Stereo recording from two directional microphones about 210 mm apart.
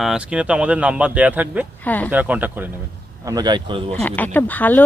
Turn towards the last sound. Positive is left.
turn(degrees=10)  # may be behind; listen again after turning